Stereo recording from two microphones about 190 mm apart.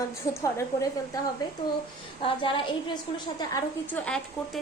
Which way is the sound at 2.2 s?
25° left (ahead or behind).